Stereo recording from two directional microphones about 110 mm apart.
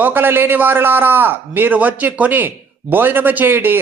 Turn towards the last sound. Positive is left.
turn(degrees=-20)  # may be behind; listen again after turning